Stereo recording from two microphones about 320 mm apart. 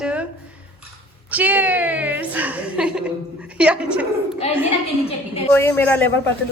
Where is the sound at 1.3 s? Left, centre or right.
Centre.